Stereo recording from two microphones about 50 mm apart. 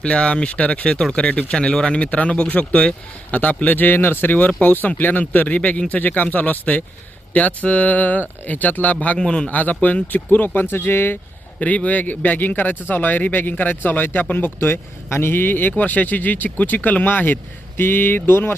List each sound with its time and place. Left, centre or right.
0.0 s speech: left
9.1 s a man's voice: centre
9.5 s speech: left
11.6 s speech: left